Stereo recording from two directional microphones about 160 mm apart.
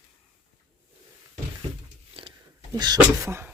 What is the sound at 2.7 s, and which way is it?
Speech, 25° right (ahead or behind).